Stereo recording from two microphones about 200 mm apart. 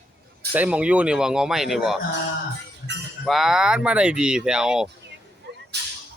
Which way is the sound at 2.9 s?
60° right (ahead or behind).